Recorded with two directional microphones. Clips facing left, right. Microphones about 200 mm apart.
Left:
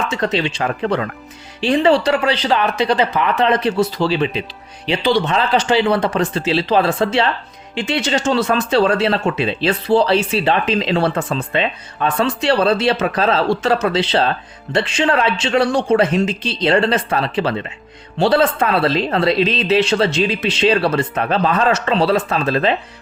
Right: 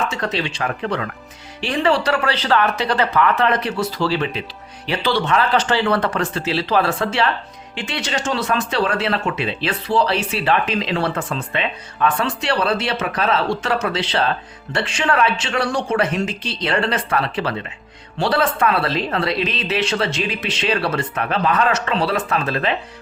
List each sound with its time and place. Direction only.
0.2 s speech: 20° left (ahead or behind)